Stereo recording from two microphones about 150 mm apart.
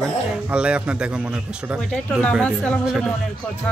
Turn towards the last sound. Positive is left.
turn(degrees=-5)  # may be behind; listen again after turning